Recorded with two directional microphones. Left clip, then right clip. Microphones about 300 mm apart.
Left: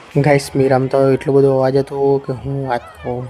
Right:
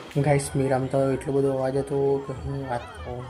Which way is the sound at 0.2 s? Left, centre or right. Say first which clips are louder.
Left 10 dB; left.